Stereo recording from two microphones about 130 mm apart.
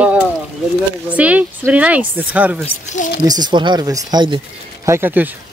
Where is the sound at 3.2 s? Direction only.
30° right (ahead or behind).